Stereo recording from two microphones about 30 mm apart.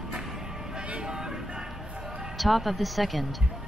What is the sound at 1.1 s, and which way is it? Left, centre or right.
Vehicle, right.